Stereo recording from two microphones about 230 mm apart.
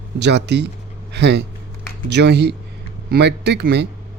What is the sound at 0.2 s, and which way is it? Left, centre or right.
Speech, right.